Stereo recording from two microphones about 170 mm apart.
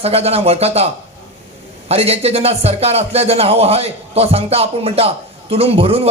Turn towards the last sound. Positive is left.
turn(degrees=-35)  # may be behind; listen again after turning